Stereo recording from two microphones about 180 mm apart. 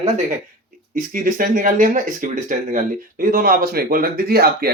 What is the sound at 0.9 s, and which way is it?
Speech, 50° right (ahead or behind).